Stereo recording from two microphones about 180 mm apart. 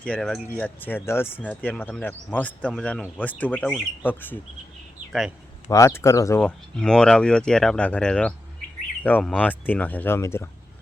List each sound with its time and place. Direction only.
0.0 s speech: 5° left (ahead or behind)
0.8 s speech: 10° left (ahead or behind)
5.6 s speech: 15° left (ahead or behind)
6.4 s speech: 5° left (ahead or behind)